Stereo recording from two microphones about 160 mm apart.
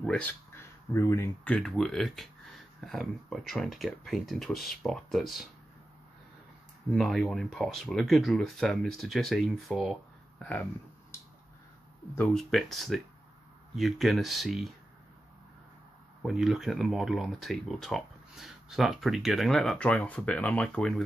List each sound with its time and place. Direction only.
0.0 s speech: 5° left (ahead or behind)
7.0 s speech: centre (ahead or behind)
12.2 s speech: 5° left (ahead or behind)
16.2 s speech: centre (ahead or behind)